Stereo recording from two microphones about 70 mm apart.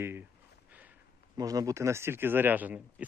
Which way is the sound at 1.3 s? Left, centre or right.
Right.